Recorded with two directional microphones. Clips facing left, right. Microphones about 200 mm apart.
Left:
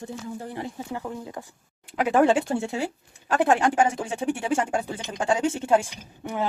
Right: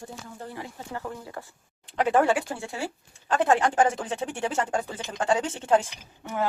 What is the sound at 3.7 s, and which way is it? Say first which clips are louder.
Speech: even; 10° left (ahead or behind).